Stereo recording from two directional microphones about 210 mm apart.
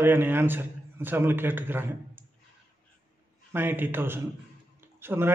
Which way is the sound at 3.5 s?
10° right (ahead or behind).